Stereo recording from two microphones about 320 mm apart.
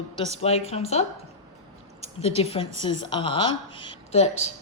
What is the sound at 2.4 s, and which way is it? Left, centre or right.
A woman's voice, centre.